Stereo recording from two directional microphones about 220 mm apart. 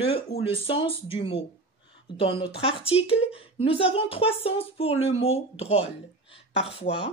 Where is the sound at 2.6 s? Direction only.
25° left (ahead or behind).